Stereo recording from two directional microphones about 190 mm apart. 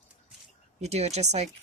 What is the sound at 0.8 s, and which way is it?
Speech, 35° right (ahead or behind).